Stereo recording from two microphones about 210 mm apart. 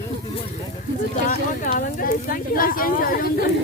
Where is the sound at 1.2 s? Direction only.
40° left (ahead or behind).